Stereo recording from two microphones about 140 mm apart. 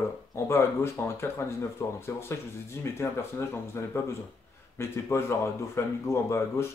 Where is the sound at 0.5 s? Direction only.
20° left (ahead or behind).